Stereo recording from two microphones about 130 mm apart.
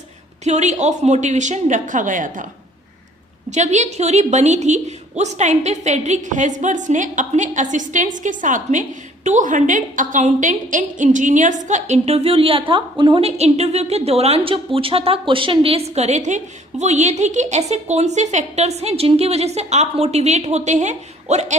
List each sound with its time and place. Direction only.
0.4 s a woman's voice: 65° right (ahead or behind); by 2.5 s 90° right
3.5 s a woman's voice: 65° right (ahead or behind); by 13.2 s 40° right (ahead or behind)
13.2 s a woman's voice: 55° right (ahead or behind)